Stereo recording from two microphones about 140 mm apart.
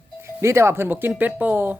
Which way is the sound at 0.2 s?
20° right (ahead or behind).